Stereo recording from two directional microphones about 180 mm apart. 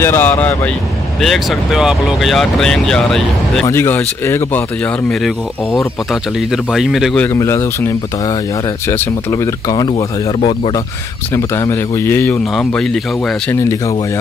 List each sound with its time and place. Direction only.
0.0 s speech: 10° left (ahead or behind)
6.5 s speech: centre (ahead or behind)
7.3 s speech: 15° left (ahead or behind)
13.5 s speech: 15° left (ahead or behind)